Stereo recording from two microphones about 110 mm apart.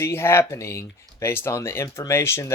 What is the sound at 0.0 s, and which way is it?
Speech, 20° left (ahead or behind).